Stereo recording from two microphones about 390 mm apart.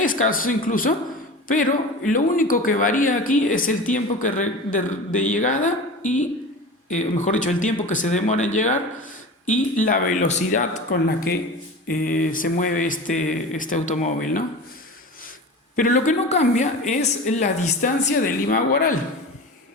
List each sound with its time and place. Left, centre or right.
0.0 s a woman's voice: left
15.7 s speech: centre